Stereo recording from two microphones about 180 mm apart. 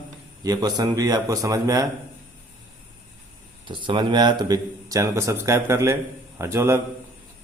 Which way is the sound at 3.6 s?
25° right (ahead or behind).